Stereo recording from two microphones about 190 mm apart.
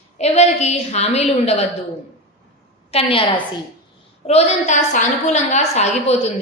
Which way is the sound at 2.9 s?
30° left (ahead or behind).